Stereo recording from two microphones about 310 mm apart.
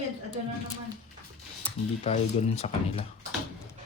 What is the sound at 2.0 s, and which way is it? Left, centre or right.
Speech, left.